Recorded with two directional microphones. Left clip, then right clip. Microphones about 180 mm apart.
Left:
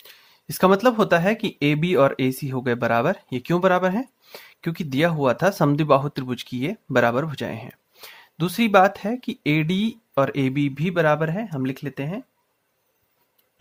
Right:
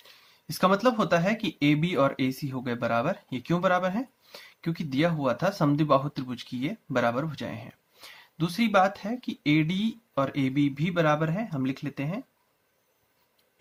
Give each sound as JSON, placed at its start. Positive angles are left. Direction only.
{"t": 0.0, "sound": "speech", "side_deg": 50}